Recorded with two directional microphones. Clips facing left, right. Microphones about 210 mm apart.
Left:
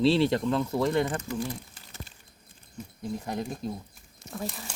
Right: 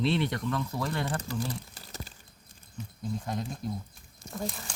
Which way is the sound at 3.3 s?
20° left (ahead or behind).